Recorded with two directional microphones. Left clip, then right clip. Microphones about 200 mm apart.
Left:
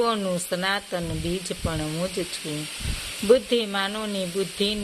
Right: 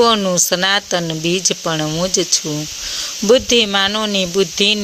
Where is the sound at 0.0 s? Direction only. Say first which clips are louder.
Right 11 dB; 30° right (ahead or behind).